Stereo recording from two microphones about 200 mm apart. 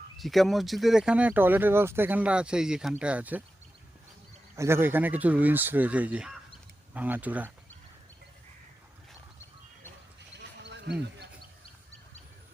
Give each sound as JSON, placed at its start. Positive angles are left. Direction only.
{"t": 0.2, "sound": "speech", "side_deg": 0}
{"t": 4.5, "sound": "speech", "side_deg": -15}
{"t": 10.3, "sound": "horse", "side_deg": -60}